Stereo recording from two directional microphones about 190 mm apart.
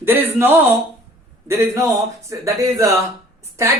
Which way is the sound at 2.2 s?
15° right (ahead or behind).